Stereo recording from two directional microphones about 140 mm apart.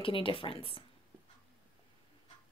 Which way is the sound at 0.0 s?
40° left (ahead or behind).